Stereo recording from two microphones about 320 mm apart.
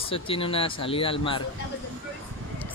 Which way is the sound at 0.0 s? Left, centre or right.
Centre.